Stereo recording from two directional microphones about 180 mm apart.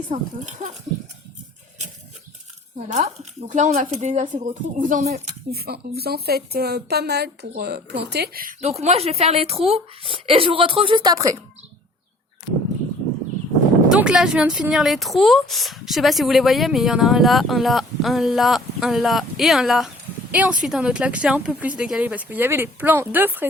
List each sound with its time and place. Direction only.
0.1 s a woman's voice: 40° right (ahead or behind)
2.7 s speech: 40° right (ahead or behind)
5.5 s a woman's voice: 60° right (ahead or behind)
8.6 s a woman's voice: 35° right (ahead or behind); by 11.3 s 20° right (ahead or behind)
13.9 s speech: 5° right (ahead or behind)